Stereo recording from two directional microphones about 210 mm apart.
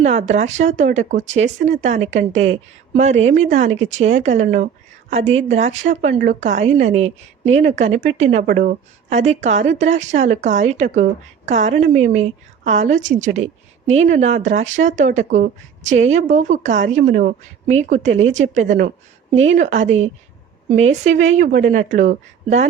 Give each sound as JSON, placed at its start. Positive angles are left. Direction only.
{"t": 0.0, "sound": "speech", "side_deg": -30}